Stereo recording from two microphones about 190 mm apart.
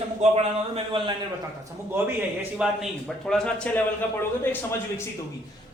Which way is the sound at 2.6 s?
5° right (ahead or behind).